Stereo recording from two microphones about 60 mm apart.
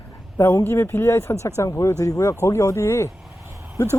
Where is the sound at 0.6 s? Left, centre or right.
Left.